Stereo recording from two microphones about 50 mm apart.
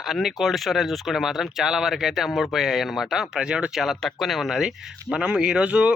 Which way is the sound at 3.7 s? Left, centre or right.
Centre.